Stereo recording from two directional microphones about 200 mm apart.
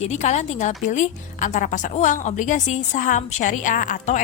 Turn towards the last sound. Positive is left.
turn(degrees=40)  # may be behind; listen again after turning